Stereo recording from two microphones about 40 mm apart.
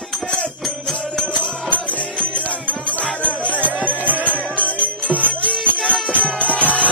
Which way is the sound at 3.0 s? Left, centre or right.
Left.